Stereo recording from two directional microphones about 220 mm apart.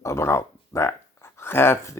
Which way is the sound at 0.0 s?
10° left (ahead or behind).